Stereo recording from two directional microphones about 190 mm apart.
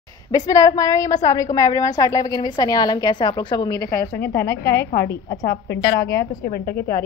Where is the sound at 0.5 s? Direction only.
20° left (ahead or behind).